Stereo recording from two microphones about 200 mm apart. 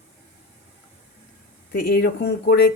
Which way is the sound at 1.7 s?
50° left (ahead or behind).